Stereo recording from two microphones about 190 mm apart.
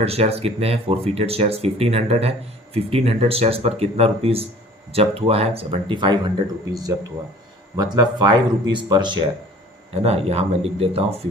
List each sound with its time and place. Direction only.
0.0 s speech: 30° right (ahead or behind)
7.8 s speech: 20° right (ahead or behind)